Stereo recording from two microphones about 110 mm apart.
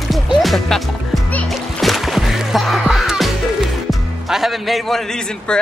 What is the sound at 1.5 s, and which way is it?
Music, centre (ahead or behind).